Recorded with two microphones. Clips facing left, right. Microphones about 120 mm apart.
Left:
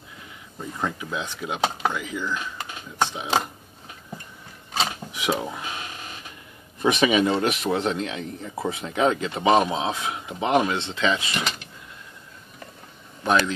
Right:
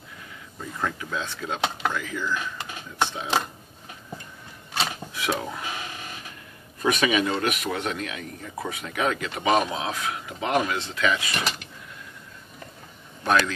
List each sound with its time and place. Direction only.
0.6 s speech: 15° left (ahead or behind)
4.7 s drawer open or close: 20° left (ahead or behind)
6.8 s speech: 25° left (ahead or behind)